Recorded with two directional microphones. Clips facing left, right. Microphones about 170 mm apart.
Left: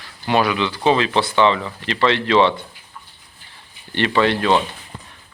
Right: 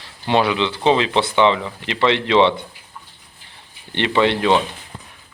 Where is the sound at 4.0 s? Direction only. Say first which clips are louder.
Even; 20° right (ahead or behind).